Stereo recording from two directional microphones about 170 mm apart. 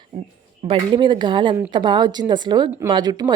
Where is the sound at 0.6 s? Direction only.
35° right (ahead or behind).